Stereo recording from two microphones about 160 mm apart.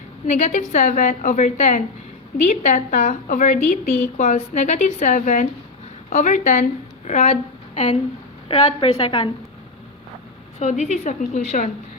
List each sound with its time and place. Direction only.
0.3 s a woman's voice: 45° left (ahead or behind)
8.4 s a woman's voice: 35° left (ahead or behind)
10.6 s a woman's voice: 45° left (ahead or behind)